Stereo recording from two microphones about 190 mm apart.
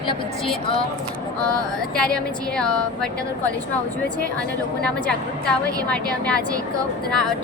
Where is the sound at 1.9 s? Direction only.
5° left (ahead or behind).